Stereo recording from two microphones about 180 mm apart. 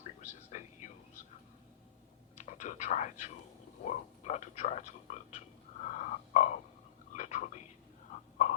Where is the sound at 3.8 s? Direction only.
40° left (ahead or behind).